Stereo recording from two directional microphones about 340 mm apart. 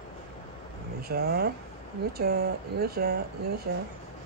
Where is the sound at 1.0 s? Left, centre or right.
Right.